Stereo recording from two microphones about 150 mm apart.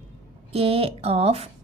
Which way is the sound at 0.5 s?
40° right (ahead or behind).